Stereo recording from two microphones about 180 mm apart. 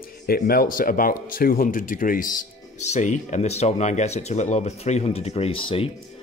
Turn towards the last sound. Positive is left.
turn(degrees=30)  # may be behind; listen again after turning